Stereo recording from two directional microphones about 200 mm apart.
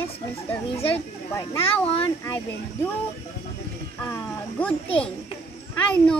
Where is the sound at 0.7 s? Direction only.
30° left (ahead or behind).